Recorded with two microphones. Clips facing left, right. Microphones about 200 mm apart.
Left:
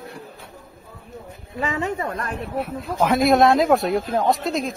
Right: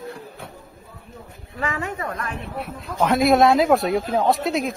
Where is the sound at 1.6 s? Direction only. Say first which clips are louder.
Left 3 dB; 25° left (ahead or behind).